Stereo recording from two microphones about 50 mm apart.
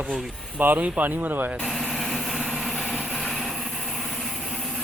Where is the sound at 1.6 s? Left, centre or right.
Centre.